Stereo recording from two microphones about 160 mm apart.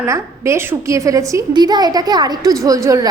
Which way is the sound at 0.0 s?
15° right (ahead or behind).